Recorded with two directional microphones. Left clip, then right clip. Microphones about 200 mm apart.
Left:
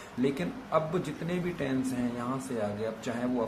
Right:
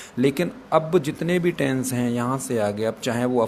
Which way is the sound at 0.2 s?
50° right (ahead or behind).